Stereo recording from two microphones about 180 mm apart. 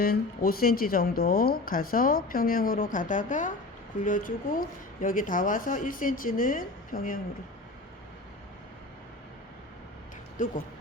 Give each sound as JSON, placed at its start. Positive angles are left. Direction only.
{"t": 0.0, "sound": "speech", "side_deg": 55}
{"t": 10.3, "sound": "speech", "side_deg": 50}